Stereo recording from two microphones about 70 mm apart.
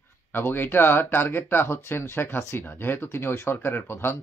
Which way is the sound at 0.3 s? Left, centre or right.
Left.